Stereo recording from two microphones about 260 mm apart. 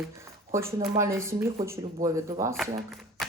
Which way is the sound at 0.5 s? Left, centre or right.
Centre.